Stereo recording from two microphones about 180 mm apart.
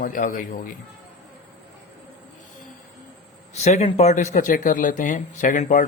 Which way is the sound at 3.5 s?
40° left (ahead or behind).